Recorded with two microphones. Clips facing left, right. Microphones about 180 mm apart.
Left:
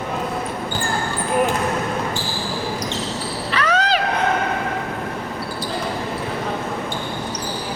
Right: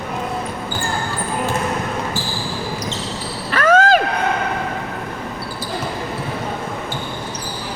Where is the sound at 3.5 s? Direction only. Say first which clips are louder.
Right 7 dB; 50° right (ahead or behind).